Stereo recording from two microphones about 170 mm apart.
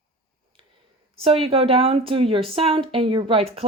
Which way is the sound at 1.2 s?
35° right (ahead or behind).